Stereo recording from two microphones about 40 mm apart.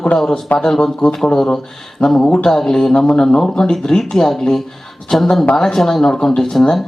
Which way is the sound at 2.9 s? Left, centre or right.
Left.